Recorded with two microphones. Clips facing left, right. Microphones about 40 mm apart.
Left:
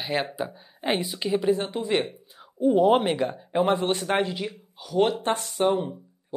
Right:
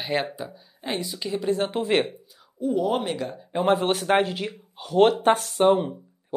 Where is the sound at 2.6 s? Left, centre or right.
Left.